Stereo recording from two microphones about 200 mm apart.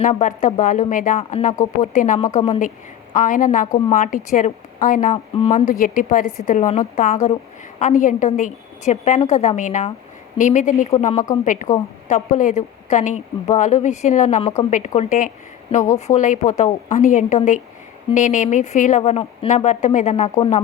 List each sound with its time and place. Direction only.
0.0 s a woman's voice: 40° left (ahead or behind)